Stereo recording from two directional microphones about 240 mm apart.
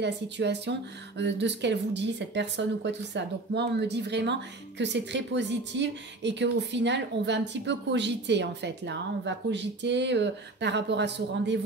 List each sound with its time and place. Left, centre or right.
0.0 s speech: right